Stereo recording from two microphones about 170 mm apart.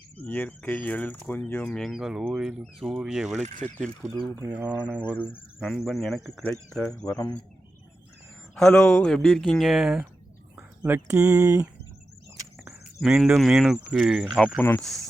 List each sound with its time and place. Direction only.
0.2 s speech: 10° left (ahead or behind)
4.4 s speech: 10° right (ahead or behind)
7.0 s speech: 20° left (ahead or behind)
8.5 s speech: 5° left (ahead or behind); by 11.6 s 20° right (ahead or behind)
13.0 s speech: 5° right (ahead or behind)
14.6 s speech: 10° left (ahead or behind)